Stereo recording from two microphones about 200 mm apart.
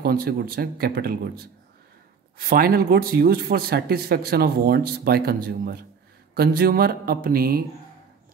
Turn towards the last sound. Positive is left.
turn(degrees=-50)  # may be behind; listen again after turning